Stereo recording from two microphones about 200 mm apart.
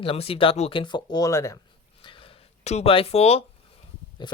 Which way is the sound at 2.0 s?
25° left (ahead or behind).